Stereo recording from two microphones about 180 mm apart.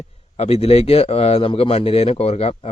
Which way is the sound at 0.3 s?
35° left (ahead or behind).